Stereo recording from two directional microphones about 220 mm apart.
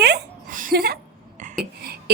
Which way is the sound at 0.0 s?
45° right (ahead or behind).